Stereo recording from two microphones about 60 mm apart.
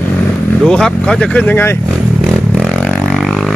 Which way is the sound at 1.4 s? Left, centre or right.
Left.